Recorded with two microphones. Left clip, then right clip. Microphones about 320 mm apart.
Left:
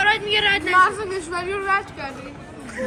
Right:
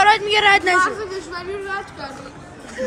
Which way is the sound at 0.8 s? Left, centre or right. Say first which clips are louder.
Left 1 dB; left.